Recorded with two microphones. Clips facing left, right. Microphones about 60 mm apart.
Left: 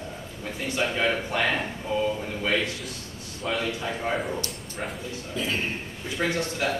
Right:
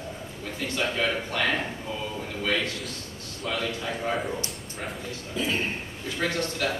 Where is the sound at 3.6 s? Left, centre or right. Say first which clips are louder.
Left 1 dB; centre.